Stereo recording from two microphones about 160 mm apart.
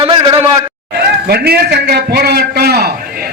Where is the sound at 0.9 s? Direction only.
80° right.